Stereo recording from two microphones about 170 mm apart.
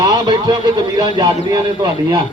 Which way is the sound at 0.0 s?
25° right (ahead or behind).